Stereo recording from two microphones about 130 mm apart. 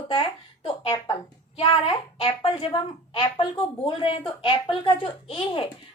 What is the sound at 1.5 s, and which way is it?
A woman's voice, 45° left (ahead or behind).